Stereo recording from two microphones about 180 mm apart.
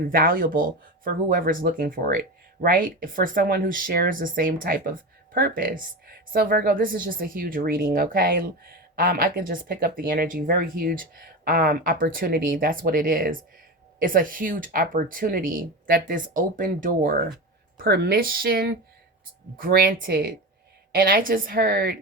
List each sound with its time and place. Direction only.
0.1 s speech: 50° right (ahead or behind)
17.7 s speech: 60° right (ahead or behind)